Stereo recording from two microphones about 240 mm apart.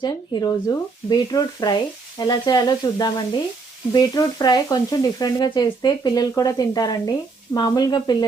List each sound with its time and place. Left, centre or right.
0.0 s speech: centre